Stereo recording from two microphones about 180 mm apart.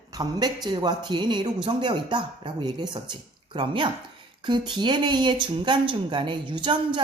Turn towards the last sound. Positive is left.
turn(degrees=-25)  # may be behind; listen again after turning